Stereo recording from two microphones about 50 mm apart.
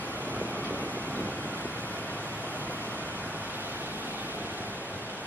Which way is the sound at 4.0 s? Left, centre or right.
Right.